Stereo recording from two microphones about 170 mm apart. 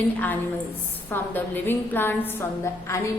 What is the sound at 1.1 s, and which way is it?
A woman's voice, 10° left (ahead or behind).